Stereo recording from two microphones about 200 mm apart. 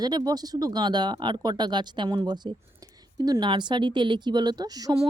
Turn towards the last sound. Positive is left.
turn(degrees=-20)  # may be behind; listen again after turning